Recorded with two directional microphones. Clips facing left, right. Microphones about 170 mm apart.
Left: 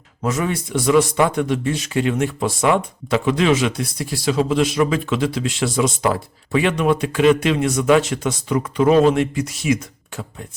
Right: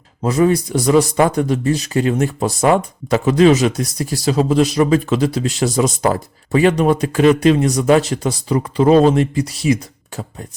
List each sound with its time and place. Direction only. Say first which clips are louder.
0.2 s a man's voice: right 7 dB; 35° right (ahead or behind)